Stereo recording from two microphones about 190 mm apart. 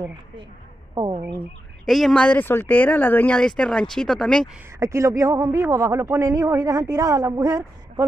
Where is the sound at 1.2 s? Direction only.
10° right (ahead or behind).